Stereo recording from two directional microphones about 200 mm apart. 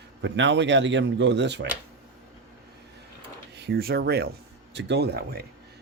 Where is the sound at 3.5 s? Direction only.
55° right (ahead or behind).